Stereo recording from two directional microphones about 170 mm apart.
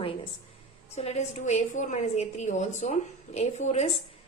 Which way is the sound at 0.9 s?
40° left (ahead or behind).